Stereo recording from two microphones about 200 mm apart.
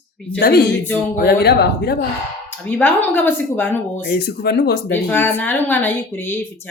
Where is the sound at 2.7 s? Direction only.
10° left (ahead or behind).